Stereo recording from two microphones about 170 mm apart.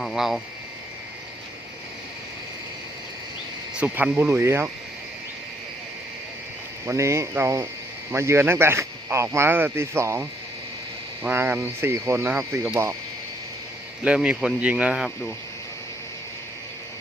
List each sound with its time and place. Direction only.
0.0 s speech: centre (ahead or behind)
3.8 s speech: 5° right (ahead or behind)
6.8 s speech: 15° right (ahead or behind)
14.0 s speech: 5° right (ahead or behind)